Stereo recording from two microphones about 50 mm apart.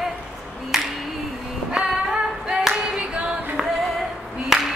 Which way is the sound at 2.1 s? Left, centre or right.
Centre.